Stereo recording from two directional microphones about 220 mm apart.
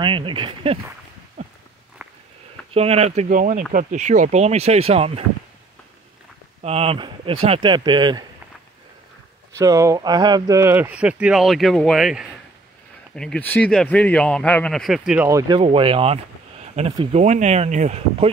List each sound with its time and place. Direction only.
0.0 s speech: 20° right (ahead or behind)
1.4 s walk: 30° right (ahead or behind)
2.7 s speech: 30° right (ahead or behind)
6.6 s speech: 25° right (ahead or behind)
9.6 s speech: 15° right (ahead or behind)
15.2 s speech: 15° right (ahead or behind); by 18.3 s 30° right (ahead or behind)